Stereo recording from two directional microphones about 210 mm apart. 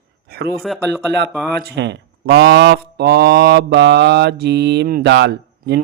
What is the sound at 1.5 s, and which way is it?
Speech, 55° right (ahead or behind).